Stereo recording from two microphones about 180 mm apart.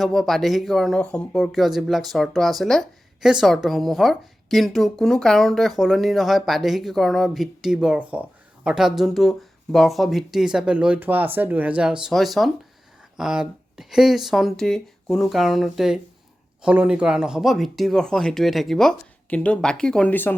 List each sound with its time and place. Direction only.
0.0 s speech: centre (ahead or behind)